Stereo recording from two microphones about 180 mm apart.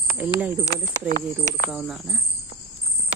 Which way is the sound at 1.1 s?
45° right (ahead or behind).